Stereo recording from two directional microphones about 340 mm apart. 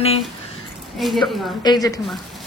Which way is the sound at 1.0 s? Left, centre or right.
Centre.